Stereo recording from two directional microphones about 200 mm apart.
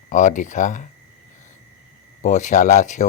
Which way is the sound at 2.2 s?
40° left (ahead or behind).